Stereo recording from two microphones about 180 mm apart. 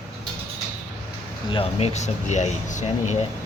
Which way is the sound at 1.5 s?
35° left (ahead or behind).